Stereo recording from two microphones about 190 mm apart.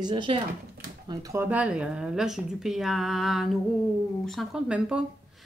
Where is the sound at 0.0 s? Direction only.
25° right (ahead or behind).